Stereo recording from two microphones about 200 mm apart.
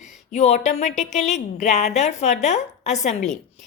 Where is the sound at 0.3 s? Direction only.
35° left (ahead or behind).